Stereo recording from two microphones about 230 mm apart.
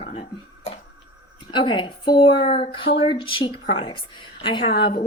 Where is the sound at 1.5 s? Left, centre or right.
Left.